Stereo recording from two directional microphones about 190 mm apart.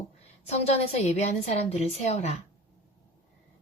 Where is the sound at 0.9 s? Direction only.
35° left (ahead or behind).